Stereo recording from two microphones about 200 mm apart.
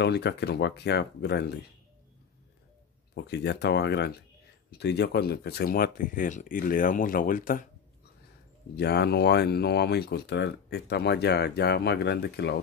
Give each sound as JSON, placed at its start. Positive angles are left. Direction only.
{"t": 0.0, "sound": "speech", "side_deg": 55}
{"t": 3.2, "sound": "speech", "side_deg": 60}
{"t": 8.7, "sound": "speech", "side_deg": 55}